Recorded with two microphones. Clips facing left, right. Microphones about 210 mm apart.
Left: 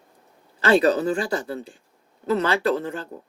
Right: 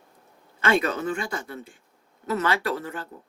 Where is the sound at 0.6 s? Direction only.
35° left (ahead or behind).